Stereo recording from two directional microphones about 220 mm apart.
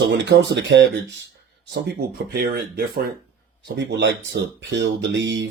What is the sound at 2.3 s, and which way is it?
Speech, 45° right (ahead or behind).